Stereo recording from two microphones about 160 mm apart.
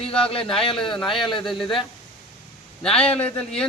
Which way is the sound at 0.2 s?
35° left (ahead or behind).